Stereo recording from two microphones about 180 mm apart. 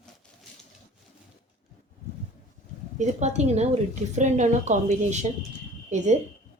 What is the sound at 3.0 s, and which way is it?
A woman's voice, 40° right (ahead or behind).